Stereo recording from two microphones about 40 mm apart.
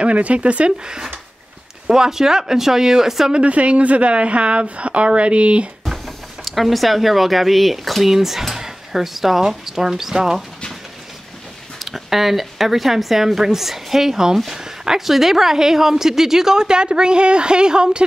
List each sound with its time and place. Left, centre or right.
0.0 s a woman's voice: right
0.8 s a woman's voice: centre
3.3 s a woman's voice: right
5.9 s a woman's voice: centre
11.8 s a woman's voice: centre; by 18.0 s right